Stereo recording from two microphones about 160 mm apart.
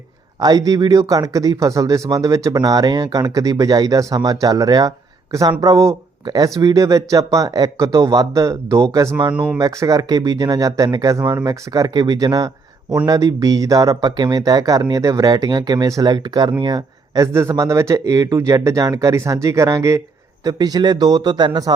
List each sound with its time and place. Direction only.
0.3 s speech: 25° right (ahead or behind)